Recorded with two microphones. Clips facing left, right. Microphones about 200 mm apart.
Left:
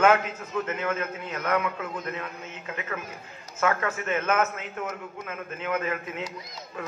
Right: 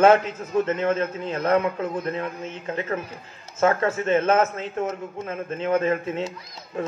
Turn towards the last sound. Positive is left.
turn(degrees=-30)  # may be behind; listen again after turning